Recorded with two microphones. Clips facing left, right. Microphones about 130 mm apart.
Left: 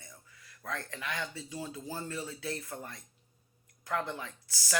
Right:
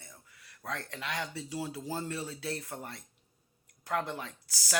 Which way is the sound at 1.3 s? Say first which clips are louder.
Right 3 dB; 75° right (ahead or behind).